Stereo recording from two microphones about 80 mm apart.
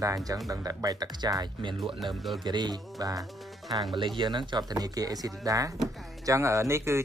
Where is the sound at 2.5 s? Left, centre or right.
Right.